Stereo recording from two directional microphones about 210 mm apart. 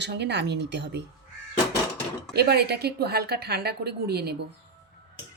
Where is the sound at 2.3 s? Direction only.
50° right (ahead or behind).